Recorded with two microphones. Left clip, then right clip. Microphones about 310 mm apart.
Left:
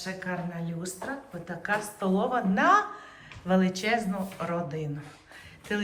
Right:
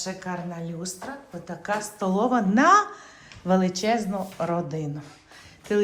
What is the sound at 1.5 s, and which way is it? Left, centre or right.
A woman's voice, centre.